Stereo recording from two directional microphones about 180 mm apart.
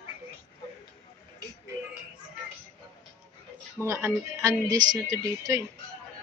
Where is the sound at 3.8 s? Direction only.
15° right (ahead or behind).